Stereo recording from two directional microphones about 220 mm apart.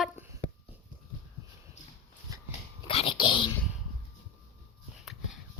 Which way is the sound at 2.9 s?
25° left (ahead or behind).